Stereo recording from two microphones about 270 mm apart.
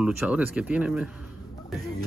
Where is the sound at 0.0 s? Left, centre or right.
Centre.